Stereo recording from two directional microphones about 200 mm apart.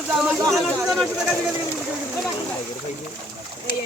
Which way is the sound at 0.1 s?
5° right (ahead or behind).